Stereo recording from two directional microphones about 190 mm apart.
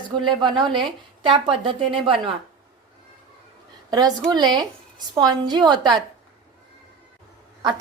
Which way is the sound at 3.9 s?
20° right (ahead or behind).